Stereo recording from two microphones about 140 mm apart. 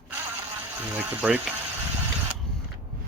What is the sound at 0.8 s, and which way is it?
Speech, 10° right (ahead or behind).